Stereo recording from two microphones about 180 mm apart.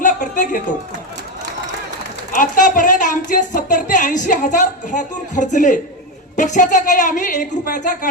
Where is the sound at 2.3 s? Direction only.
50° left (ahead or behind).